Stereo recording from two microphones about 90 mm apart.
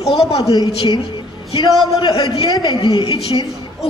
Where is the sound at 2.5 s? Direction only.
55° left (ahead or behind).